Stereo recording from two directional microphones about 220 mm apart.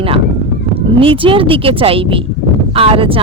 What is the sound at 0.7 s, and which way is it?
Speech, 25° right (ahead or behind).